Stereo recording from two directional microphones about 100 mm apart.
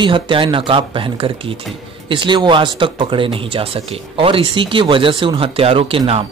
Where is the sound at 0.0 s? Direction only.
55° right (ahead or behind).